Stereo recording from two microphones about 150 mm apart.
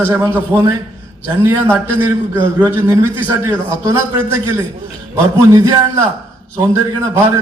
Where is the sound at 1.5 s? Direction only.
15° right (ahead or behind).